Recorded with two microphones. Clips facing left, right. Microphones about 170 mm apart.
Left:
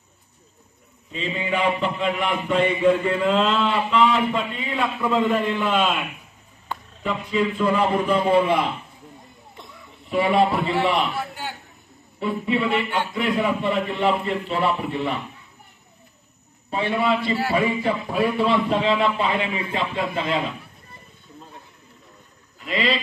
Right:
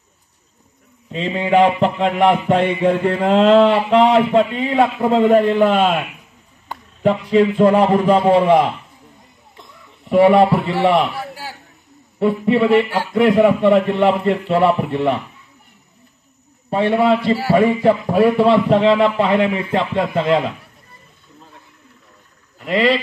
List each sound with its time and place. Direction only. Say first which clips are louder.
1.1 s a man's voice: right 10 dB; 70° right (ahead or behind)
7.2 s a man's voice: right 8 dB; 65° right (ahead or behind)
10.0 s a man's voice: right 8 dB; 60° right (ahead or behind)
12.2 s a man's voice: right 8 dB; 55° right (ahead or behind)
16.7 s a man's voice: right 7 dB; 55° right (ahead or behind)
18.0 s a man's voice: right 7 dB; 60° right (ahead or behind); by 20.4 s 45° right (ahead or behind)
22.6 s speech: right 8 dB; 55° right (ahead or behind)